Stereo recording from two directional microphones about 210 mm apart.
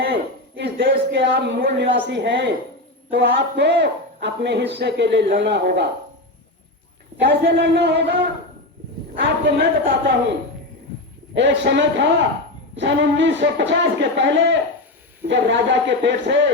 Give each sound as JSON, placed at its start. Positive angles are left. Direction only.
{"t": 0.0, "sound": "speech", "side_deg": -50}
{"t": 7.2, "sound": "a woman's voice", "side_deg": -55}
{"t": 11.3, "sound": "speech", "side_deg": -55}